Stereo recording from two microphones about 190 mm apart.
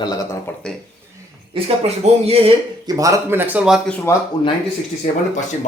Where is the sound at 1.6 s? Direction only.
30° right (ahead or behind).